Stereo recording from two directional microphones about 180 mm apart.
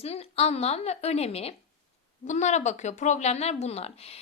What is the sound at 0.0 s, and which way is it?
A woman's voice, 35° left (ahead or behind).